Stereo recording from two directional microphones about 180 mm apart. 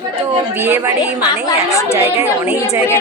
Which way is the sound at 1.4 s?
15° left (ahead or behind).